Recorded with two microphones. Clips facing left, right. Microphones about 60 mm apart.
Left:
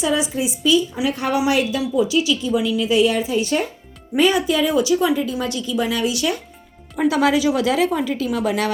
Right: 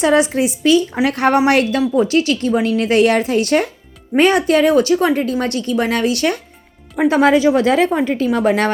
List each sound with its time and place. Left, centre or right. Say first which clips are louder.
0.0 s a woman's voice: right 7 dB; right
6.9 s a woman's voice: right 5 dB; right